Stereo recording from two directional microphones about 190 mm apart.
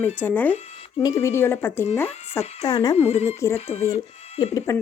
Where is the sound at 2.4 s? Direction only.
35° left (ahead or behind).